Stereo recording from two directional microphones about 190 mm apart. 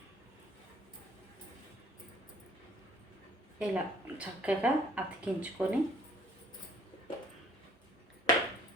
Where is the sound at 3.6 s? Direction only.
5° right (ahead or behind).